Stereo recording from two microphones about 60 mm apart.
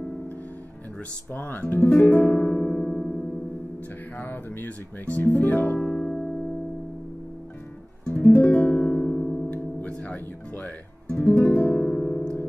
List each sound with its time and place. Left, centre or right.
1.3 s speech: left
2.6 s music: centre
4.2 s speech: left
5.8 s music: centre
8.1 s guitar: left
8.8 s music: centre
9.5 s guitar: left